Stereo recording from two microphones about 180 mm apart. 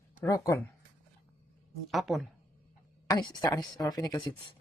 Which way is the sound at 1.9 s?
Centre (ahead or behind).